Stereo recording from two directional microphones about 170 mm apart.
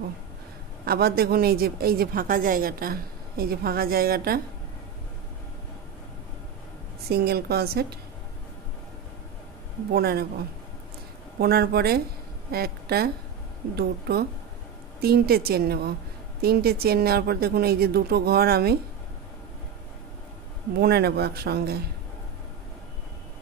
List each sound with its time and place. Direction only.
0.8 s a woman's voice: 65° right (ahead or behind)
7.1 s speech: 65° right (ahead or behind)
9.9 s speech: 65° right (ahead or behind)
11.3 s a woman's voice: 65° right (ahead or behind)
20.8 s speech: 70° right (ahead or behind)